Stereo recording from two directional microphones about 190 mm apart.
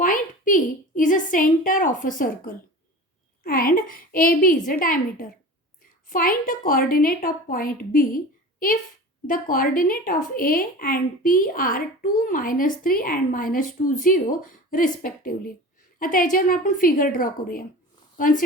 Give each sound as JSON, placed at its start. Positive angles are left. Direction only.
{"t": 0.0, "sound": "a woman's voice", "side_deg": 45}